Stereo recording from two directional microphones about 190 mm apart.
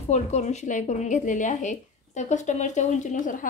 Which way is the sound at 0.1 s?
35° left (ahead or behind).